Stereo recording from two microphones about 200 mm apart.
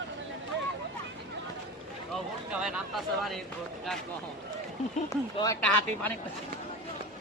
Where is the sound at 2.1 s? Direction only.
5° right (ahead or behind).